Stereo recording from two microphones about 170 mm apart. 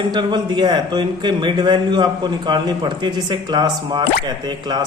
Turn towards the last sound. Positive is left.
turn(degrees=-25)  # may be behind; listen again after turning